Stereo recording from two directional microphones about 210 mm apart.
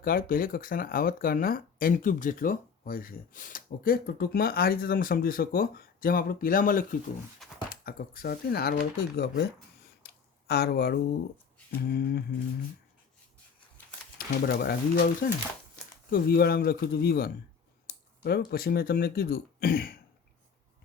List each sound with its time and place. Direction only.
0.0 s speech: 45° left (ahead or behind)
10.0 s a sound: 50° left (ahead or behind)
11.8 s speech: 45° left (ahead or behind)
14.2 s speech: 45° left (ahead or behind)
16.0 s speech: 45° left (ahead or behind)